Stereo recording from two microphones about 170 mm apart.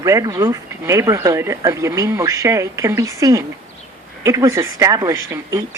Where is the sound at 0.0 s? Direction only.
20° right (ahead or behind).